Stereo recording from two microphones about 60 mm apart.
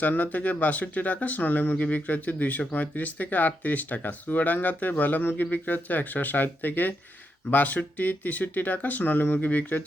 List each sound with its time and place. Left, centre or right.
0.0 s speech: left